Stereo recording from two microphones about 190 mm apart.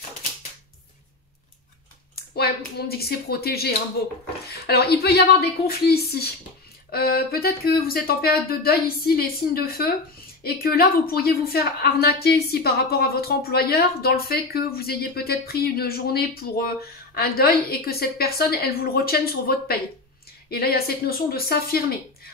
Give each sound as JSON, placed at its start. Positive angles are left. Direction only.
{"t": 2.3, "sound": "a woman's voice", "side_deg": 55}